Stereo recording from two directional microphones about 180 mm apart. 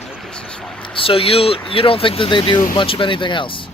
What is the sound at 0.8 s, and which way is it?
Speech, 30° left (ahead or behind).